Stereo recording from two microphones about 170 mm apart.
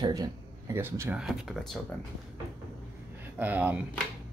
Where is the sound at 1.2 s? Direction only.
Centre (ahead or behind).